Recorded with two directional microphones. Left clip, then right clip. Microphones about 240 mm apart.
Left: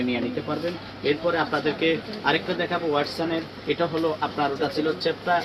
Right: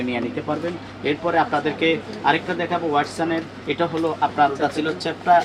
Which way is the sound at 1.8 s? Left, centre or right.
Centre.